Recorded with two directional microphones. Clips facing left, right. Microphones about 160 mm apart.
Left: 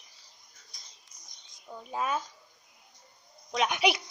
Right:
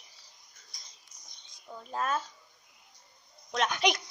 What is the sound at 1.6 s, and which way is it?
Speech, 5° left (ahead or behind).